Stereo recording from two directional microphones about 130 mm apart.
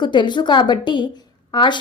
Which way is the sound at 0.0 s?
35° left (ahead or behind).